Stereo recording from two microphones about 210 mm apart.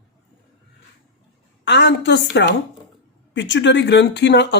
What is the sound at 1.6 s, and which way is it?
Speech, 55° left (ahead or behind).